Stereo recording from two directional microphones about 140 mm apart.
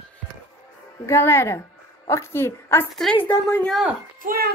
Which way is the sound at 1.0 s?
20° left (ahead or behind).